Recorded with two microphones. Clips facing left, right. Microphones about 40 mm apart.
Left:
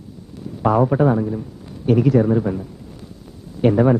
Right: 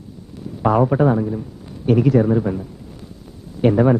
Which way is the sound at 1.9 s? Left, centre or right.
Centre.